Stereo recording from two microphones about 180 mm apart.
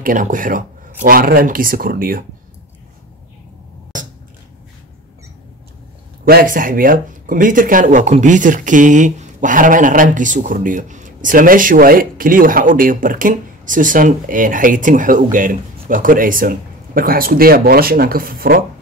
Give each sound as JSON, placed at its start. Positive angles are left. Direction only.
{"t": 0.0, "sound": "speech", "side_deg": -45}
{"t": 6.2, "sound": "speech", "side_deg": -50}